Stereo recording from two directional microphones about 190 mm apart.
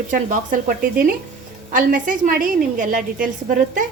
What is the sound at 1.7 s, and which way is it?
A woman's voice, 45° right (ahead or behind).